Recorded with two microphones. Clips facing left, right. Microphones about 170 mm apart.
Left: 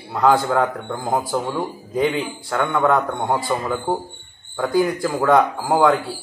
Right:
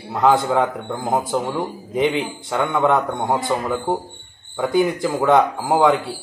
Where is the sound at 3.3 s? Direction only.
15° right (ahead or behind).